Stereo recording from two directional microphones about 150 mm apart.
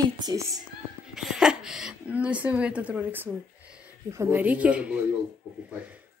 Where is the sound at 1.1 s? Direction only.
5° right (ahead or behind).